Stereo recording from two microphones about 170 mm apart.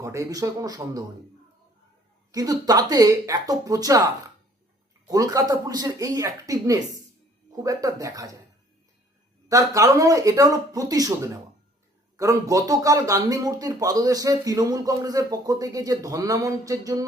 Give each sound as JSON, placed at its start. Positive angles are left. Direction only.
{"t": 0.0, "sound": "speech", "side_deg": -20}
{"t": 2.3, "sound": "speech", "side_deg": -20}
{"t": 5.0, "sound": "speech", "side_deg": -20}
{"t": 9.5, "sound": "speech", "side_deg": -20}